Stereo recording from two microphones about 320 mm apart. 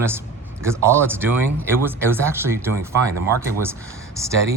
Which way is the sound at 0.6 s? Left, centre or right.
Centre.